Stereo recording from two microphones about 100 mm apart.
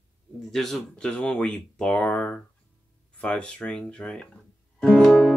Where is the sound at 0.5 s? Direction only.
Centre (ahead or behind).